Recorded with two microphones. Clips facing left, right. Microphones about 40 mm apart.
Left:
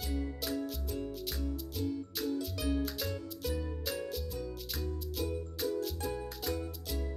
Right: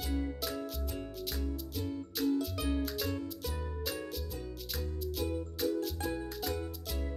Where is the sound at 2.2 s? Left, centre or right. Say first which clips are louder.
Right 5 dB; centre.